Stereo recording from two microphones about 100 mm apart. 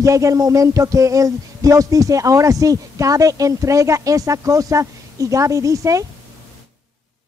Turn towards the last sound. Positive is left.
turn(degrees=-35)  # may be behind; listen again after turning